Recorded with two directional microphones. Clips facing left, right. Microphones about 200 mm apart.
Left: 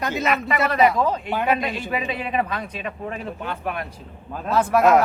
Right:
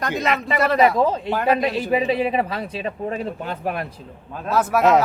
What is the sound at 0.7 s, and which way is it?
A man's voice, 35° right (ahead or behind).